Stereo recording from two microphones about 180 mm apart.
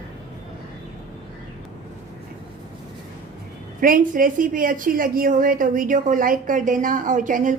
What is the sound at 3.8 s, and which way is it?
A woman's voice, 50° right (ahead or behind).